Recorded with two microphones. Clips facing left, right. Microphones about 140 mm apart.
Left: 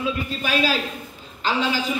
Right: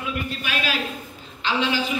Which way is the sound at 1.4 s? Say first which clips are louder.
Left 1 dB; 40° left (ahead or behind).